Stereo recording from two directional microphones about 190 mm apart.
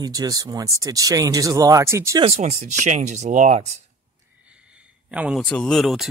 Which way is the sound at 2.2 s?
35° right (ahead or behind).